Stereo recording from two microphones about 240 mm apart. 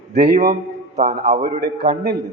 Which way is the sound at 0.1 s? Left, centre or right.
Right.